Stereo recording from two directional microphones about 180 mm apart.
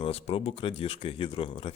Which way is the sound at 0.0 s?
35° left (ahead or behind).